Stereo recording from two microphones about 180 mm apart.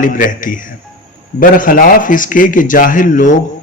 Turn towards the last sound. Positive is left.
turn(degrees=45)  # may be behind; listen again after turning